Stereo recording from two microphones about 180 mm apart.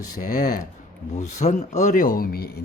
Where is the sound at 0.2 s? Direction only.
50° left (ahead or behind).